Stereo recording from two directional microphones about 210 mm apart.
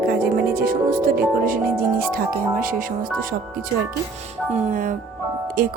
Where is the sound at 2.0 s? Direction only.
45° right (ahead or behind).